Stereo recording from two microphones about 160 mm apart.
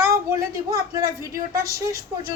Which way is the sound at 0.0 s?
20° right (ahead or behind).